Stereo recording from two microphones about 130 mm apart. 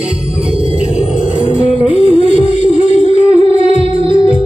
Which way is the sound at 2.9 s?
60° left (ahead or behind).